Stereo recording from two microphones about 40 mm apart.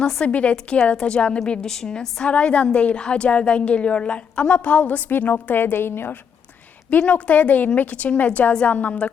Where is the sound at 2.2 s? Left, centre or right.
Left.